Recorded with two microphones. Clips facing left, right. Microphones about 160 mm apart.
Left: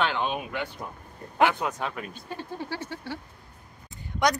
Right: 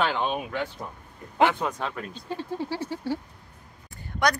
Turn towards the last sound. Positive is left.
turn(degrees=20)  # may be behind; listen again after turning